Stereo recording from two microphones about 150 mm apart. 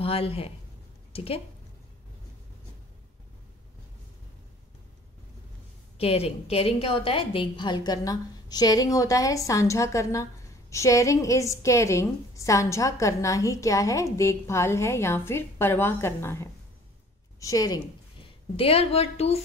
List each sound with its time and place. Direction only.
0.0 s a woman's voice: 40° left (ahead or behind)
5.9 s a woman's voice: 40° left (ahead or behind); by 17.7 s 25° left (ahead or behind)
18.2 s a woman's voice: 40° left (ahead or behind)